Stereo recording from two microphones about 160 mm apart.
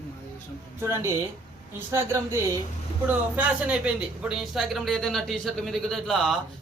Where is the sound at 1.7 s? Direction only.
15° right (ahead or behind).